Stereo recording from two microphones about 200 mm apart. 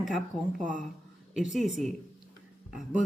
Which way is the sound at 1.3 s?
Centre (ahead or behind).